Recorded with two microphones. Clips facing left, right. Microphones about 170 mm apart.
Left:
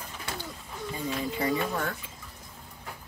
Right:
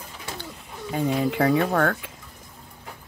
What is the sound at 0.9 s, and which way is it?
Speech, 70° right (ahead or behind).